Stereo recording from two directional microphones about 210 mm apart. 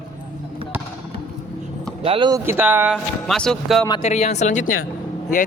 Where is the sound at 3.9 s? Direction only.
30° left (ahead or behind).